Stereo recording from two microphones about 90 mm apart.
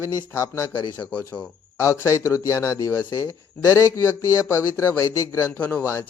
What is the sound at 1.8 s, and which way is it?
A man's voice, 35° left (ahead or behind).